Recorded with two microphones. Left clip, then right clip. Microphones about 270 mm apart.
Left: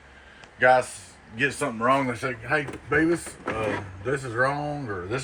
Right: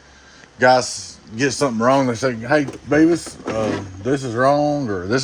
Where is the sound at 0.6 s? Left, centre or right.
Right.